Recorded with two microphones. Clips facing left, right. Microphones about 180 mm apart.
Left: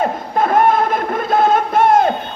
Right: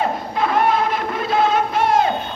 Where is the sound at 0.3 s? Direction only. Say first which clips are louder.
Left 5 dB; 50° left (ahead or behind).